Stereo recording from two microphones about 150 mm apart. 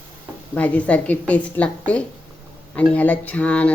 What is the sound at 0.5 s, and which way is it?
Speech, 10° left (ahead or behind).